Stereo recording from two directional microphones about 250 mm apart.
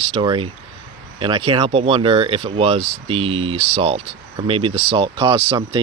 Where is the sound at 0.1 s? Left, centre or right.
Right.